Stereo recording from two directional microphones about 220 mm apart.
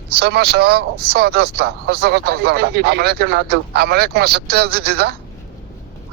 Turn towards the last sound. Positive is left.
turn(degrees=-45)  # may be behind; listen again after turning